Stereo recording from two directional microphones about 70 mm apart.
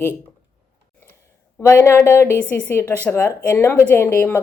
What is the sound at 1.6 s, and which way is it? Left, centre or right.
Speech, left.